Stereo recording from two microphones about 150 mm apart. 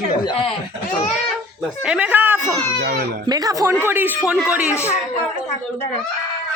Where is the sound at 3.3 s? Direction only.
25° right (ahead or behind).